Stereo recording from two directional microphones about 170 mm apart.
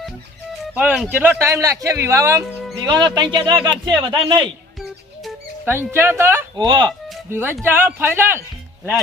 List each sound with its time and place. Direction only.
0.6 s music: 5° right (ahead or behind)
1.1 s a man's voice: 10° right (ahead or behind)
5.6 s a man's voice: 10° right (ahead or behind)
6.6 s speech: 25° right (ahead or behind)
7.3 s a man's voice: 15° right (ahead or behind)